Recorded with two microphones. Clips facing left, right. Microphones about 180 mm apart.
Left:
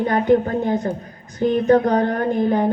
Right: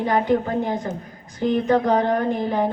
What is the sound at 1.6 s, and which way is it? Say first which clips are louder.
Speech: left 4 dB; 45° left (ahead or behind).